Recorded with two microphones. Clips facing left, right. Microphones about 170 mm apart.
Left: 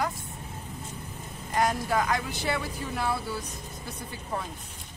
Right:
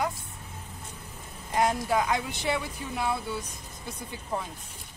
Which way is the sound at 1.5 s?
20° right (ahead or behind).